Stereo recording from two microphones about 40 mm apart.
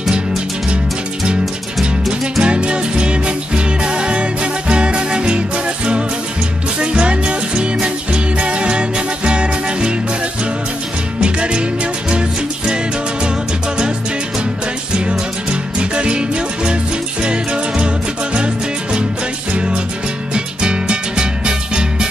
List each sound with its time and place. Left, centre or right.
2.4 s music: right
6.8 s music: right
11.2 s music: right
15.8 s music: right
20.3 s music: right